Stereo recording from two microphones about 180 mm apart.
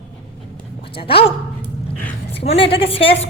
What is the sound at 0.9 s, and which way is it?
Speech, 30° left (ahead or behind).